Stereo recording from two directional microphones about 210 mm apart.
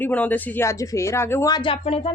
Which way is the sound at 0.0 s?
10° left (ahead or behind).